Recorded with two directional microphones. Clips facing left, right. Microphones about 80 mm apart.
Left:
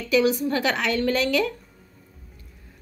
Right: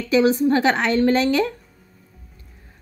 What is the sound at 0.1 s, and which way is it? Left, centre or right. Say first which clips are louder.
A woman's voice: right 4 dB; right.